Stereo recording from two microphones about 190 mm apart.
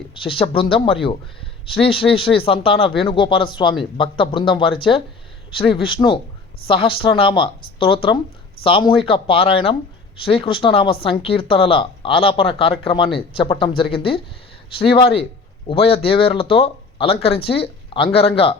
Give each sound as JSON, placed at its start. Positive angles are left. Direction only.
{"t": 0.1, "sound": "speech", "side_deg": 30}